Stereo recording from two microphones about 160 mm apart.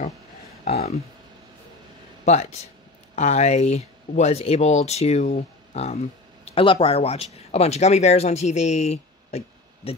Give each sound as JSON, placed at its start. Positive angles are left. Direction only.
{"t": 0.7, "sound": "speech", "side_deg": 40}
{"t": 2.2, "sound": "speech", "side_deg": 45}